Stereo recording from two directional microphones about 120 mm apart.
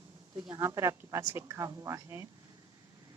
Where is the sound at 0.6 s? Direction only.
20° right (ahead or behind).